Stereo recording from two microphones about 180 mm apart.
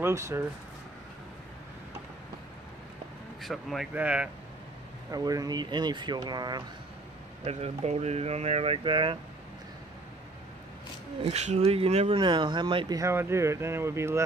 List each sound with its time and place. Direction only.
0.0 s speech: 15° right (ahead or behind)
3.4 s speech: centre (ahead or behind)
5.1 s speech: 20° right (ahead or behind)
7.4 s speech: 35° right (ahead or behind)
11.2 s speech: 35° right (ahead or behind)
13.0 s speech: 15° right (ahead or behind)